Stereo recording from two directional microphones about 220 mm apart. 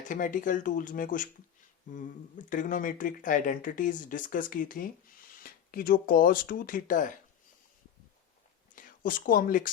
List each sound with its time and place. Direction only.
0.1 s speech: 35° left (ahead or behind)
8.7 s speech: 40° left (ahead or behind)